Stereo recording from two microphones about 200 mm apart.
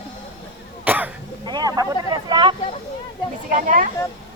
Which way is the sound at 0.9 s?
10° right (ahead or behind).